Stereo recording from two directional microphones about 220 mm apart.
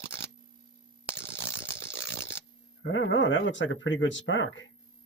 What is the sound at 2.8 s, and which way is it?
Speech, 60° left (ahead or behind).